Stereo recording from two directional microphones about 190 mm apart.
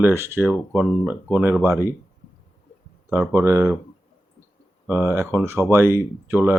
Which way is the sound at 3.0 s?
5° right (ahead or behind).